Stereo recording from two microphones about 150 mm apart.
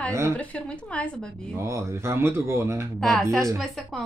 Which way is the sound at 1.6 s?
20° right (ahead or behind).